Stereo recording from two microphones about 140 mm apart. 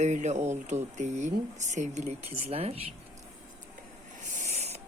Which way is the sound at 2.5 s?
45° right (ahead or behind).